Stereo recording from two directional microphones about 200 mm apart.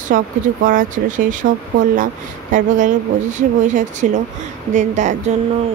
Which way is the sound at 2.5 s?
40° right (ahead or behind).